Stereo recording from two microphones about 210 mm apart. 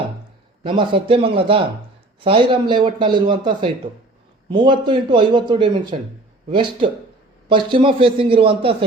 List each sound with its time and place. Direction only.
0.6 s a man's voice: 25° right (ahead or behind)